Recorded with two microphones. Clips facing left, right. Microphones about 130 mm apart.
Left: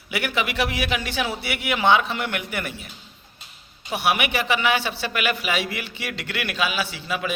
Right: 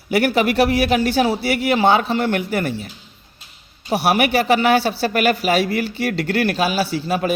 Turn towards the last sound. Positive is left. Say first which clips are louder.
# right 7 dB
turn(degrees=-40)  # may be behind; listen again after turning